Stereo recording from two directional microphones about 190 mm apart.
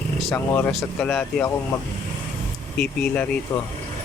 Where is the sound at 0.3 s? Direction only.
10° left (ahead or behind).